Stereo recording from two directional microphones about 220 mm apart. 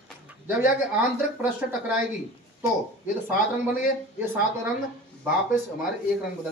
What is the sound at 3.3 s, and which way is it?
Speech, 40° left (ahead or behind).